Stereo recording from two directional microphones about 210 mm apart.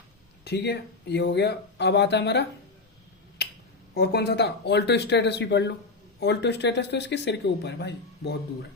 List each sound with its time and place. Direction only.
0.4 s speech: 50° left (ahead or behind)
3.4 s finger snapping: 50° left (ahead or behind)
3.9 s speech: 50° left (ahead or behind)